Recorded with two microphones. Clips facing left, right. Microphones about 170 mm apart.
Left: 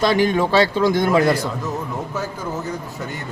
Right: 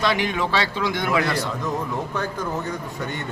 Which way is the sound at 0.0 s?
40° left (ahead or behind).